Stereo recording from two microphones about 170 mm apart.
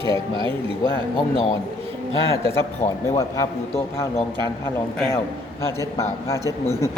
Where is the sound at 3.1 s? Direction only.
20° left (ahead or behind).